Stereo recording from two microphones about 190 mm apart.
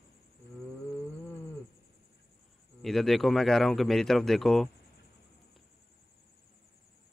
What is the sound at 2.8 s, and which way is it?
Speech, centre (ahead or behind).